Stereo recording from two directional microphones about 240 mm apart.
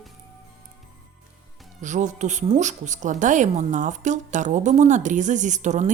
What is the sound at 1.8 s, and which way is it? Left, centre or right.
A woman's voice, right.